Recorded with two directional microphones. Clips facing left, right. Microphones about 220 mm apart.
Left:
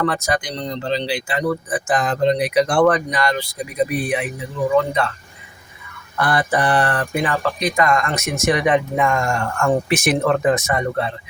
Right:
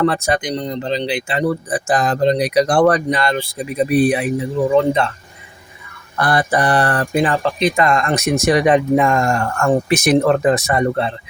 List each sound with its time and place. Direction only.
0.0 s speech: 25° right (ahead or behind)
6.1 s speech: 35° right (ahead or behind)